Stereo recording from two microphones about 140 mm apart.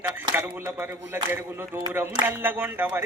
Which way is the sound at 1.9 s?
15° right (ahead or behind).